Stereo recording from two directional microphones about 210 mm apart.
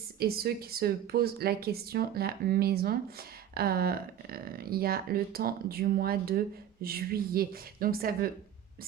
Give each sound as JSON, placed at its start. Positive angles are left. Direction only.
{"t": 0.2, "sound": "speech", "side_deg": -45}